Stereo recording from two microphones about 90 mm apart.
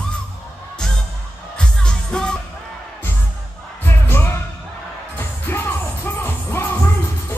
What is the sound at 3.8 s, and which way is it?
Music, 25° left (ahead or behind).